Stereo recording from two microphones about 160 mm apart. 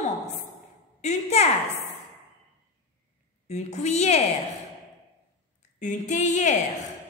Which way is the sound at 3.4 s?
45° left (ahead or behind).